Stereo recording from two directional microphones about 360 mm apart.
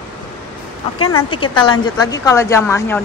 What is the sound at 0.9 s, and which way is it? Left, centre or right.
Speech, left.